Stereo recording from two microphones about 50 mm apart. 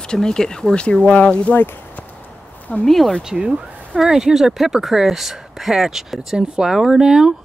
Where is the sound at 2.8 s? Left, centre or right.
Centre.